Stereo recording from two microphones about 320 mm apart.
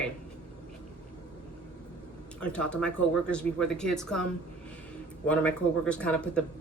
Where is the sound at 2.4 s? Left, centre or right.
Centre.